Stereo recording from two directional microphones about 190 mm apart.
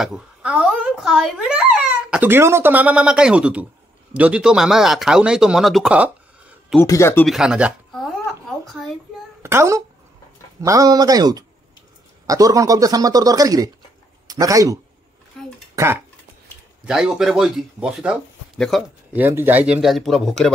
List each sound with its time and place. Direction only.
0.0 s a child's voice: 5° right (ahead or behind)
6.8 s speech: 15° left (ahead or behind)
7.2 s speech: 5° right (ahead or behind)
9.4 s a child's voice: 15° right (ahead or behind)
15.3 s a sound: 5° left (ahead or behind)
15.7 s speech: 15° right (ahead or behind)
16.8 s a child's voice: 5° right (ahead or behind)